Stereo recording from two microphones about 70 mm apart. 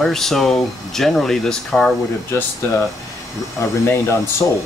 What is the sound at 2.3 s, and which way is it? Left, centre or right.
Speech, left.